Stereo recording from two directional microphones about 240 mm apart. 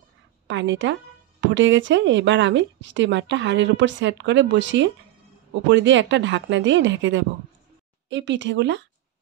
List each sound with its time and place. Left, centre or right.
0.5 s speech: right